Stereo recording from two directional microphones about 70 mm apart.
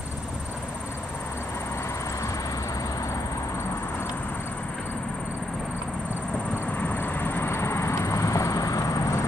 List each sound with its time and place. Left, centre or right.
6.8 s vehicle: left